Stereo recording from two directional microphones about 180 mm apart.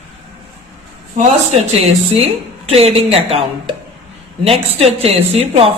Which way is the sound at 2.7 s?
35° right (ahead or behind).